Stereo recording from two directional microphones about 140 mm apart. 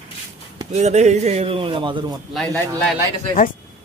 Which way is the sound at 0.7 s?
55° right (ahead or behind).